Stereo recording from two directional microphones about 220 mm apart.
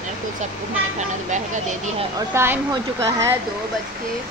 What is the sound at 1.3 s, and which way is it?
Speech, 35° right (ahead or behind).